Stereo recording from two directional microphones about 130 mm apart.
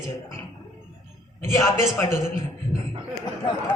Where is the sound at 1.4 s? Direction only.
25° left (ahead or behind).